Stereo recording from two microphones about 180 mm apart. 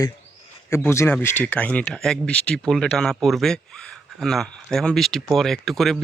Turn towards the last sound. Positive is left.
turn(degrees=0)  # may be behind; listen again after turning